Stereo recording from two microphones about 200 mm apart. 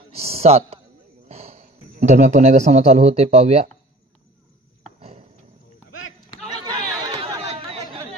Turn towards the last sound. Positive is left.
turn(degrees=-30)  # may be behind; listen again after turning